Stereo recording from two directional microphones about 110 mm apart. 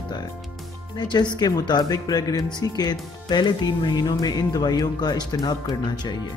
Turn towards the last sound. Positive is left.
turn(degrees=40)  # may be behind; listen again after turning